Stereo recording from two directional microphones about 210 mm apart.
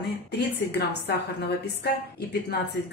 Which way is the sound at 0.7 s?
50° left (ahead or behind).